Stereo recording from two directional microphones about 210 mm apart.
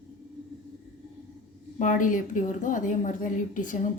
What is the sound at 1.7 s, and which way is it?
A woman's voice, 40° left (ahead or behind).